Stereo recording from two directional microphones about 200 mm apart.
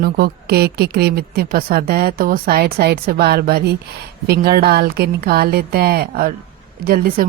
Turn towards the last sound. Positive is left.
turn(degrees=-45)  # may be behind; listen again after turning